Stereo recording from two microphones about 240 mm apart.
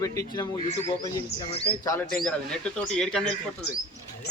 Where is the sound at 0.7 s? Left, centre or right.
Left.